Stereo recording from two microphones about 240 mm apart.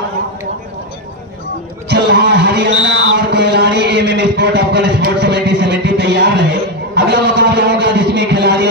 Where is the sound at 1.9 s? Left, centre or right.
Right.